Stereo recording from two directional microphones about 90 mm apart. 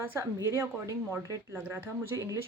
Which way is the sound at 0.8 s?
35° right (ahead or behind).